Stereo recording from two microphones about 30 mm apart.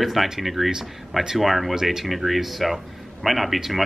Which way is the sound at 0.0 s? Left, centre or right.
Centre.